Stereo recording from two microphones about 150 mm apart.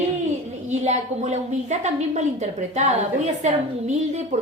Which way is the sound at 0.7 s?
50° right (ahead or behind).